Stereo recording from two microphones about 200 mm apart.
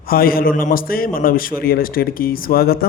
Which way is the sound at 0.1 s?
50° left (ahead or behind).